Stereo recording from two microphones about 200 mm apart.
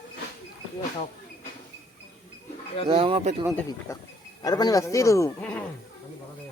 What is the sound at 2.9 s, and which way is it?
Speech, 30° right (ahead or behind).